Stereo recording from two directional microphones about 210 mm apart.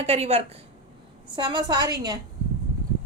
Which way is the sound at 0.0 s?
30° right (ahead or behind).